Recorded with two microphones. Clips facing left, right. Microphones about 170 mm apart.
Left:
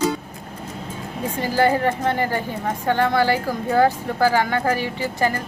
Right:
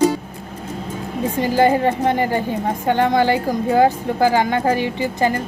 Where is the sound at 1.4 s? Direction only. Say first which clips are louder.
Right 3 dB; 15° right (ahead or behind).